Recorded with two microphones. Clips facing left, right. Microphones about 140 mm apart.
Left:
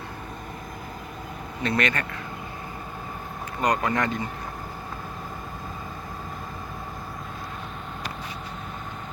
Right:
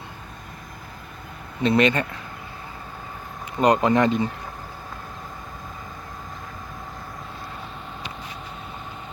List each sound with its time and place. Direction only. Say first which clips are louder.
1.6 s speech: right 7 dB; 20° right (ahead or behind)
3.6 s speech: right 6 dB; 25° right (ahead or behind)